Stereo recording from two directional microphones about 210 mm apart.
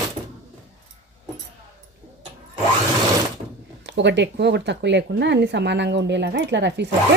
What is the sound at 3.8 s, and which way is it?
Speech, 60° right (ahead or behind).